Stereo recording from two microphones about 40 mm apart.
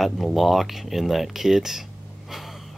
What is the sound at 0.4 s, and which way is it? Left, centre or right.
Speech, centre.